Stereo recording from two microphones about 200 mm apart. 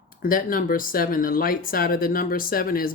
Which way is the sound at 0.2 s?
45° left (ahead or behind).